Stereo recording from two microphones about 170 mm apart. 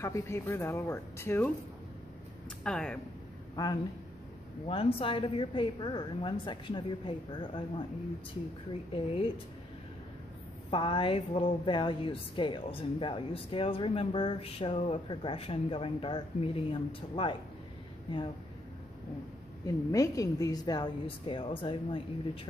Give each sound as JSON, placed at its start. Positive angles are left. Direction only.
{"t": 0.0, "sound": "speech", "side_deg": 15}
{"t": 2.6, "sound": "speech", "side_deg": 5}
{"t": 3.6, "sound": "a woman's voice", "side_deg": 20}
{"t": 4.6, "sound": "a woman's voice", "side_deg": 35}
{"t": 10.7, "sound": "a woman's voice", "side_deg": 30}
{"t": 19.6, "sound": "a woman's voice", "side_deg": 20}